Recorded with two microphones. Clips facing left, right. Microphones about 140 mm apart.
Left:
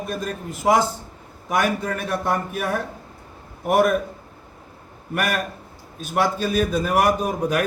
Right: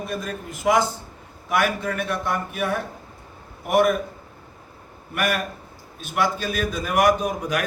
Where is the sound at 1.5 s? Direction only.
40° left (ahead or behind).